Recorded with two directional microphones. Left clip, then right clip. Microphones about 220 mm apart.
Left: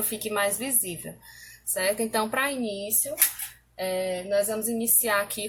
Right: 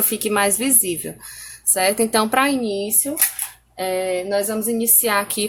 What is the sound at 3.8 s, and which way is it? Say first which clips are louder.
A woman's voice: right 7 dB; 40° right (ahead or behind).